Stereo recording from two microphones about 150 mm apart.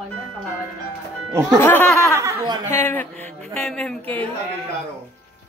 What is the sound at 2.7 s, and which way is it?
A man's voice, 15° left (ahead or behind).